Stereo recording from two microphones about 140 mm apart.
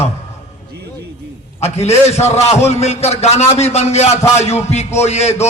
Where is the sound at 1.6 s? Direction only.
50° left (ahead or behind).